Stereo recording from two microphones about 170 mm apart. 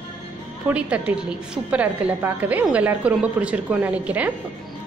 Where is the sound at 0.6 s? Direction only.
10° right (ahead or behind).